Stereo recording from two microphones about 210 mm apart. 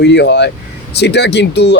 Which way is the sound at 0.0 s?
55° left (ahead or behind).